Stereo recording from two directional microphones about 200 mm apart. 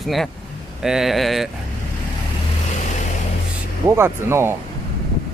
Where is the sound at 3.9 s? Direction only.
10° right (ahead or behind).